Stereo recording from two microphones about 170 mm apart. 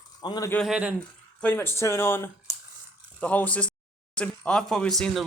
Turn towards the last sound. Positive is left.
turn(degrees=0)  # may be behind; listen again after turning